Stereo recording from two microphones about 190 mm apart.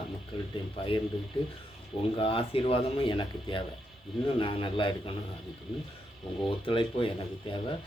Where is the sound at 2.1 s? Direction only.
30° left (ahead or behind).